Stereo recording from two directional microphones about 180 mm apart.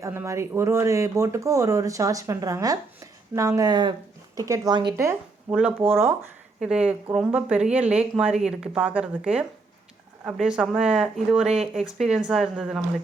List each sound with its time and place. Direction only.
0.0 s a woman's voice: 15° right (ahead or behind)
5.5 s speech: 5° right (ahead or behind)